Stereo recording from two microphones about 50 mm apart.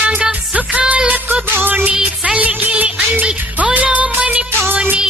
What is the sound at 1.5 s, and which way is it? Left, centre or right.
Music, right.